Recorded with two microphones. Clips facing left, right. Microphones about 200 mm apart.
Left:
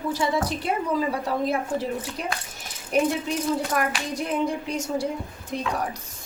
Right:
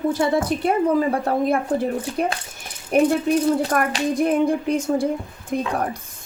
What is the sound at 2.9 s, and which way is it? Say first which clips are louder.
A woman's voice: right 6 dB; 55° right (ahead or behind).